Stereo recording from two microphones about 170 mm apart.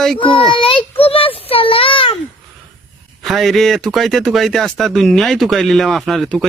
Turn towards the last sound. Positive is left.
turn(degrees=0)  # may be behind; listen again after turning